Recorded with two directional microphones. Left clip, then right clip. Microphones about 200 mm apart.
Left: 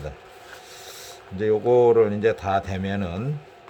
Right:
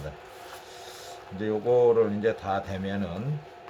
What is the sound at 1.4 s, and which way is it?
A man's voice, 50° left (ahead or behind).